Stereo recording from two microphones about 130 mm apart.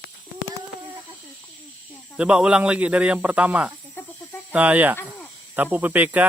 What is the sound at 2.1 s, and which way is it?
Speech, 10° right (ahead or behind).